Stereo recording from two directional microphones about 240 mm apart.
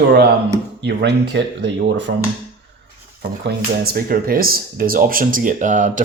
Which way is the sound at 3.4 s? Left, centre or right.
Right.